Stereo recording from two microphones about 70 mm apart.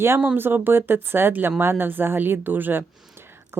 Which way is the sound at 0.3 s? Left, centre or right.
Right.